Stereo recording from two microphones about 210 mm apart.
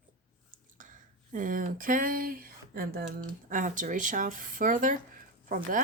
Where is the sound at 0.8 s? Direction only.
40° right (ahead or behind).